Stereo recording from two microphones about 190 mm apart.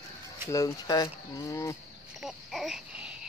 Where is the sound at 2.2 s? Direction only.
Centre (ahead or behind).